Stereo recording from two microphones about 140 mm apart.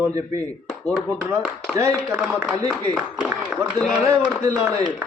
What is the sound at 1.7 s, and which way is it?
Speech, 20° right (ahead or behind).